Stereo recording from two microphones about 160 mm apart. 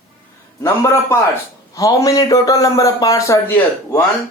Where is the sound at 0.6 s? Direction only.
15° left (ahead or behind).